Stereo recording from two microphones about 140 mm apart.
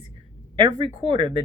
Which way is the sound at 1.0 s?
35° right (ahead or behind).